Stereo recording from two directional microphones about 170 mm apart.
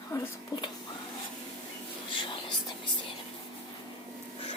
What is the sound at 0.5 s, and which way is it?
Whispering, 25° left (ahead or behind).